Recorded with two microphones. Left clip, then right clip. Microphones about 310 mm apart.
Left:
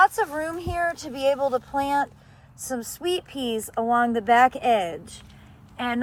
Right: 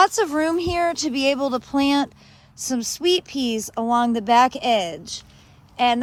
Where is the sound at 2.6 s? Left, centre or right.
Centre.